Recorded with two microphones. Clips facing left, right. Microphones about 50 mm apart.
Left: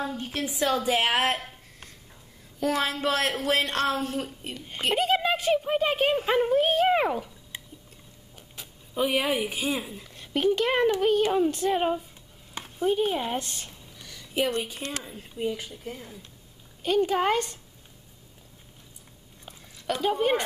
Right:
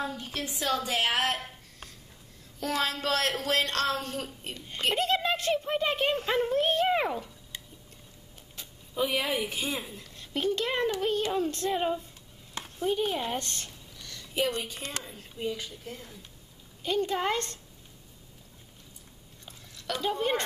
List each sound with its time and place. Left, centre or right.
0.4 s speech: centre
1.4 s a sound: centre
2.6 s speech: centre
7.5 s liquid: left
8.4 s speech: centre
10.1 s speech: left
12.5 s a sound: centre
14.5 s speech: centre
19.4 s a sound: centre